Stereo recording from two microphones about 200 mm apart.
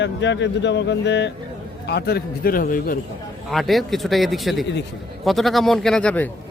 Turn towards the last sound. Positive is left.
turn(degrees=5)  # may be behind; listen again after turning